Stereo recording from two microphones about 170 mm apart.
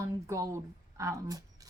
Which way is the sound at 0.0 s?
15° right (ahead or behind).